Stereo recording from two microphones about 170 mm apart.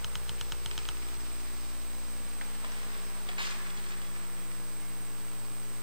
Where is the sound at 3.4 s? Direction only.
30° right (ahead or behind).